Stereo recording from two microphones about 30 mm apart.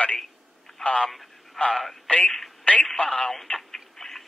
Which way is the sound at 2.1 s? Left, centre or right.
Left.